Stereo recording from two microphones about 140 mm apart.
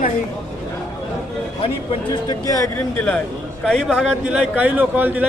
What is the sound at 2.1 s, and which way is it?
Speech, 30° left (ahead or behind).